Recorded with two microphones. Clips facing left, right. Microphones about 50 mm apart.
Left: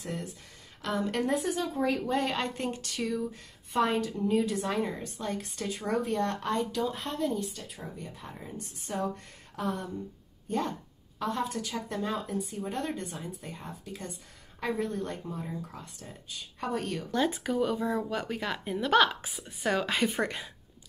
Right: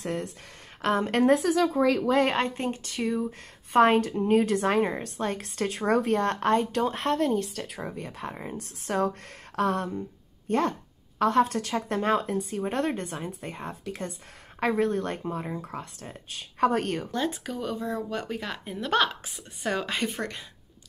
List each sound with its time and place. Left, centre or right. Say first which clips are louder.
0.0 s speech: right 6 dB; right
1.4 s a woman's voice: right 7 dB; right
2.2 s speech: right 5 dB; right
3.3 s speech: right 4 dB; right
9.6 s a sound: right 7 dB; right
10.5 s speech: right 6 dB; right
17.1 s speech: left 1 dB; centre